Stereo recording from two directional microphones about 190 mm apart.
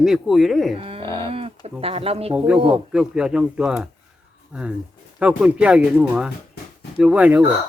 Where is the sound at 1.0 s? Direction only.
15° left (ahead or behind).